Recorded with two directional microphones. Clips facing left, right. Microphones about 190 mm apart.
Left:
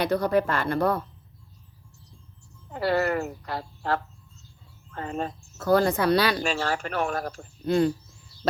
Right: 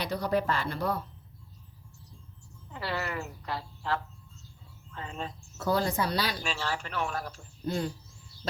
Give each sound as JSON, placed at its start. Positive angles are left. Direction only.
{"t": 0.0, "sound": "speech", "side_deg": 55}
{"t": 2.7, "sound": "speech", "side_deg": 45}
{"t": 6.4, "sound": "speech", "side_deg": 45}
{"t": 7.7, "sound": "speech", "side_deg": 70}